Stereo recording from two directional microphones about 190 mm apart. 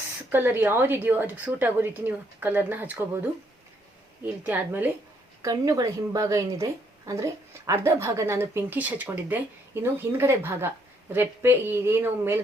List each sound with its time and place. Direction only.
0.3 s a woman's voice: 10° right (ahead or behind)